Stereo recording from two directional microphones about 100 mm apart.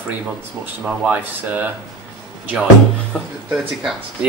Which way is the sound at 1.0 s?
15° right (ahead or behind).